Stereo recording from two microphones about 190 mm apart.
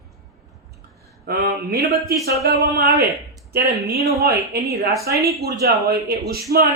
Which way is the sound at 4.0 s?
15° right (ahead or behind).